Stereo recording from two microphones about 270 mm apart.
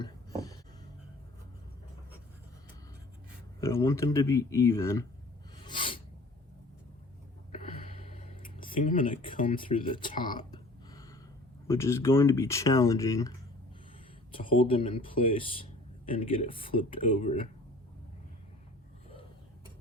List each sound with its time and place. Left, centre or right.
3.6 s speech: centre
5.6 s filing: centre
8.2 s a sound: left
8.9 s speech: left
9.6 s speech: centre
10.2 s a sound: centre
11.7 s speech: centre
14.3 s speech: centre